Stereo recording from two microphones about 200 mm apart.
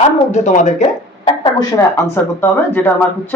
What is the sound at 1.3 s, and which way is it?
Speech, 20° left (ahead or behind).